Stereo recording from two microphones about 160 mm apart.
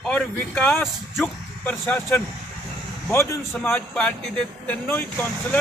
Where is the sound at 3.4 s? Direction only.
Centre (ahead or behind).